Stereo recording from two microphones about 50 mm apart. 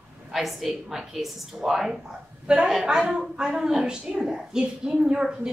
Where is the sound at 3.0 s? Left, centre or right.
Centre.